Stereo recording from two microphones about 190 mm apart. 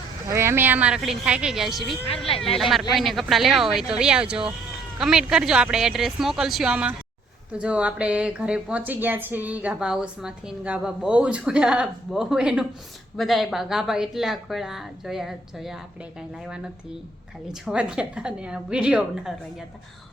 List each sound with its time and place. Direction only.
0.3 s a woman's voice: 15° right (ahead or behind)
17.5 s speech: 5° right (ahead or behind)